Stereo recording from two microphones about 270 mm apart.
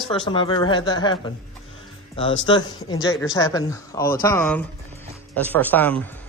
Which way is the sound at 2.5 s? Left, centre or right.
Centre.